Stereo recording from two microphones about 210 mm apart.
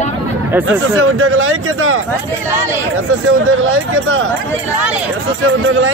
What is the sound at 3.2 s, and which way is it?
Speech, 75° right (ahead or behind).